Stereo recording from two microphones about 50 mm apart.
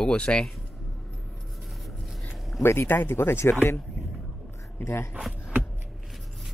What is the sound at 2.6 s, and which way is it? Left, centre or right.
Speech, left.